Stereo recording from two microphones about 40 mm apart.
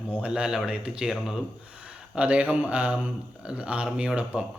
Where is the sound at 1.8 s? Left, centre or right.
Right.